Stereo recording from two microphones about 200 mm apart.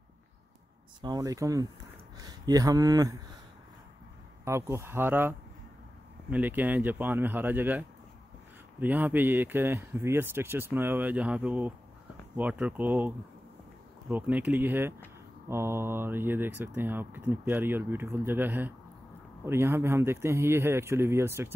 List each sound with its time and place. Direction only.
1.0 s speech: 20° right (ahead or behind)
4.5 s speech: 15° right (ahead or behind)
6.3 s speech: 10° right (ahead or behind)